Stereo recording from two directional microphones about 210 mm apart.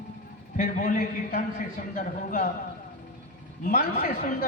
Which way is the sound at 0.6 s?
40° left (ahead or behind).